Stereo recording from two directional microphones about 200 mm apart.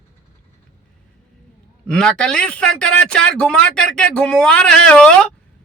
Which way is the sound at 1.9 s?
5° left (ahead or behind).